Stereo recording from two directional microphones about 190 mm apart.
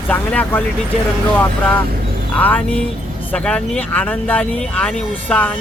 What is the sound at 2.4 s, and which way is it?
Speech, 10° left (ahead or behind).